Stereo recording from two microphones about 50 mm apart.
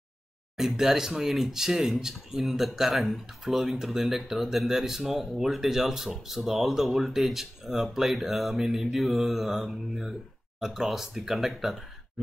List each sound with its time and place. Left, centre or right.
0.6 s speech: centre